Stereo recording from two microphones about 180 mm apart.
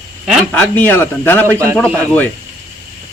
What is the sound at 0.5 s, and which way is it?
Speech, 10° left (ahead or behind).